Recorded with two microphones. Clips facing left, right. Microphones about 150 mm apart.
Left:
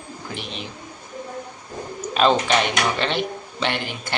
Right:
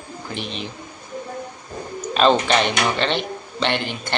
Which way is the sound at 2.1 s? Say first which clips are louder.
Right 2 dB; 5° left (ahead or behind).